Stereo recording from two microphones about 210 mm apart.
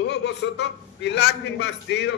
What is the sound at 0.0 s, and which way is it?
A man's voice, 55° left (ahead or behind).